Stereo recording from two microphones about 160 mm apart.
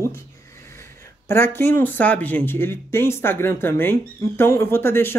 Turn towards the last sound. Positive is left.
turn(degrees=15)  # may be behind; listen again after turning